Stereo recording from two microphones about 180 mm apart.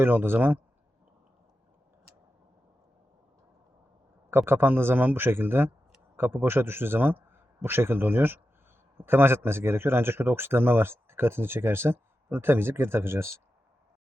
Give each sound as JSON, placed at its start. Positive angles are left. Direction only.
{"t": 0.0, "sound": "speech", "side_deg": -10}
{"t": 4.3, "sound": "a man's voice", "side_deg": -10}